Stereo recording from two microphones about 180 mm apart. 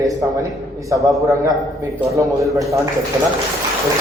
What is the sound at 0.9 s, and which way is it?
Speech, 15° right (ahead or behind).